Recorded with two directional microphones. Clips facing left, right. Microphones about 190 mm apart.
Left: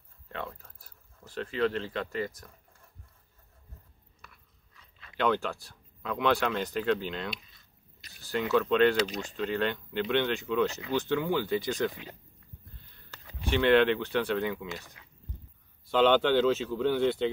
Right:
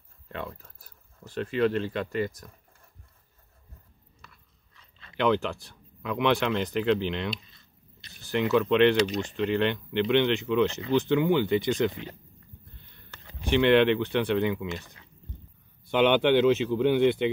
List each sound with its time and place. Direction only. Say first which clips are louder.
1.2 s speech: right 4 dB; 20° right (ahead or behind)
5.1 s speech: right 3 dB; 20° right (ahead or behind)
13.5 s speech: right 3 dB; 15° right (ahead or behind)
16.0 s speech: right 2 dB; 15° right (ahead or behind)